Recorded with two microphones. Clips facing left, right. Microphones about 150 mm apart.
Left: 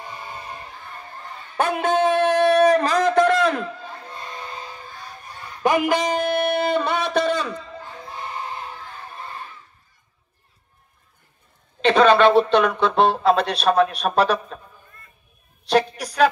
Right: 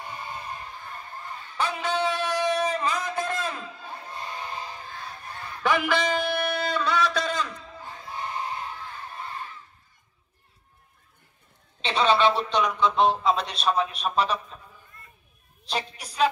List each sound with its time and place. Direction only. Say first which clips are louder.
1.6 s shofar: left 7 dB; 55° left (ahead or behind); by 3.7 s 75° left (ahead or behind)
5.6 s a sound: left 5 dB; 45° left (ahead or behind); by 7.7 s 70° left (ahead or behind)
11.8 s speech: left 7 dB; 60° left (ahead or behind)
15.6 s a woman's voice: left 12 dB; 70° left (ahead or behind)